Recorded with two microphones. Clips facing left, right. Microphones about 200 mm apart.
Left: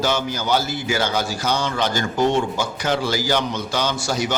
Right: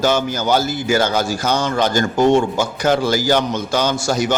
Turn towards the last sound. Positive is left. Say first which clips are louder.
# right 5 dB
turn(degrees=-45)  # may be behind; listen again after turning